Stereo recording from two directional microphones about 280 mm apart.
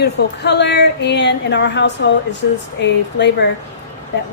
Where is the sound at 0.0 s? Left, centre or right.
Left.